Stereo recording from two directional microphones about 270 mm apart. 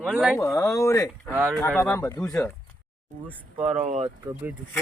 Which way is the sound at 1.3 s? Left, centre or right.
Centre.